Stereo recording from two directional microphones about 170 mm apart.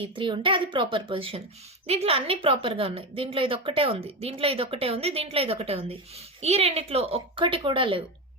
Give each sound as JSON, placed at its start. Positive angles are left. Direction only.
{"t": 0.0, "sound": "a woman's voice", "side_deg": -30}